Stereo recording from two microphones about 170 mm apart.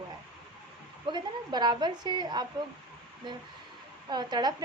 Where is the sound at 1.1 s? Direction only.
25° right (ahead or behind).